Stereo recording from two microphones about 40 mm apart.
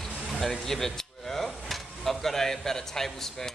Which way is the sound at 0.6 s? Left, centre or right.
Centre.